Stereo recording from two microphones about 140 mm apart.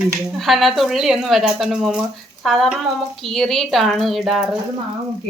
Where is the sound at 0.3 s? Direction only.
Centre (ahead or behind).